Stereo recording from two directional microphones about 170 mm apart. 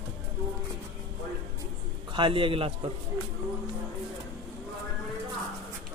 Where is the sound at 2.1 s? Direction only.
30° right (ahead or behind).